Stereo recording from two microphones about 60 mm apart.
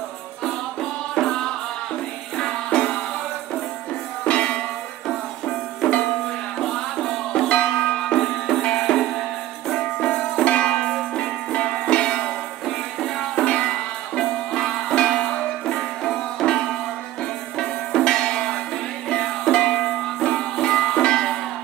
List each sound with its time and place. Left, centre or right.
0.4 s music: centre
4.2 s music: centre
7.4 s music: centre